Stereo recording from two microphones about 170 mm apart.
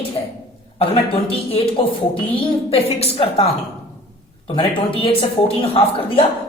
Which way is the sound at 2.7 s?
35° left (ahead or behind).